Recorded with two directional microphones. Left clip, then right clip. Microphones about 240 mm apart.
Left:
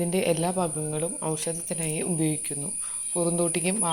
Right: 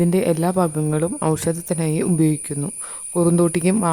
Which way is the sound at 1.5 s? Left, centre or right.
Right.